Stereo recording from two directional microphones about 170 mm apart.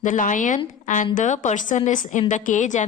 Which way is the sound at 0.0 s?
50° left (ahead or behind).